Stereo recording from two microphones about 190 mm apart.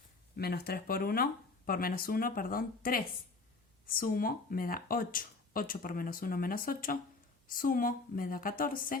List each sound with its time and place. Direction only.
0.3 s speech: 55° left (ahead or behind)